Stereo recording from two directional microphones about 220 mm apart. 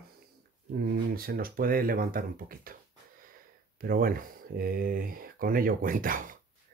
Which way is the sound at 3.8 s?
40° right (ahead or behind).